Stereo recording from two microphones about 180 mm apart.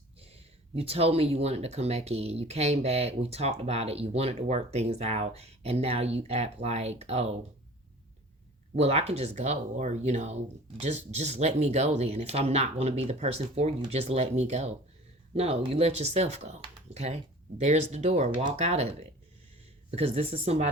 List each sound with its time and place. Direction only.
0.2 s speech: 35° right (ahead or behind)
8.7 s speech: 35° right (ahead or behind)